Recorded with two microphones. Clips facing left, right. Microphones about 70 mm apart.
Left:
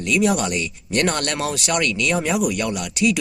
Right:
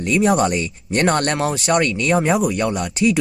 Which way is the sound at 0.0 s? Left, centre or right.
Right.